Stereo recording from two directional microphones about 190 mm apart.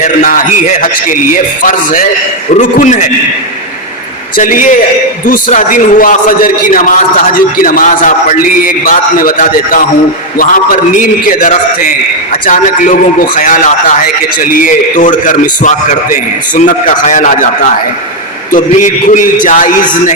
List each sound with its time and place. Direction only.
0.0 s a man's voice: 45° left (ahead or behind)
4.4 s a man's voice: 45° left (ahead or behind)
18.5 s a man's voice: 45° left (ahead or behind)